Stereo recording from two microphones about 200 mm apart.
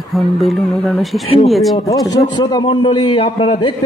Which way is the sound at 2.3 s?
20° left (ahead or behind).